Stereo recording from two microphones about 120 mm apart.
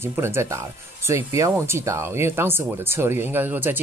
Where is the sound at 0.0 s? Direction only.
20° right (ahead or behind).